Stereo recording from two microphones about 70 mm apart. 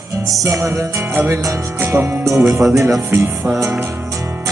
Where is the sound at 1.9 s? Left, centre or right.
Right.